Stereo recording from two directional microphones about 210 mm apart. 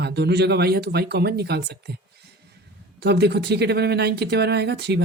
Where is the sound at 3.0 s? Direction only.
50° right (ahead or behind).